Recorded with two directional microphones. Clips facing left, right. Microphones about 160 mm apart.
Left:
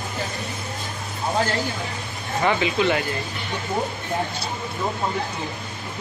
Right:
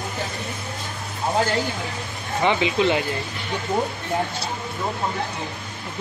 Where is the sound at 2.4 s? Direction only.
20° right (ahead or behind).